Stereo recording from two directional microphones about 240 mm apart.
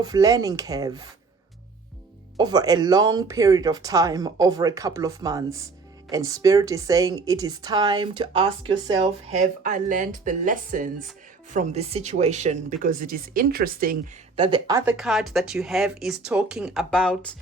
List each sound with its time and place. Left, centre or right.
0.0 s a woman's voice: centre
2.4 s a woman's voice: centre
9.3 s speech: right
14.3 s speech: right; by 17.3 s centre